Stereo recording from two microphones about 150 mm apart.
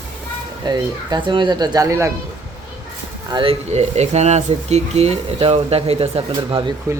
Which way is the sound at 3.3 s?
35° right (ahead or behind).